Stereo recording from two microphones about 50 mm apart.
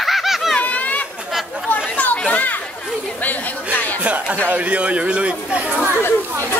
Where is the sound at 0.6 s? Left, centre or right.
Left.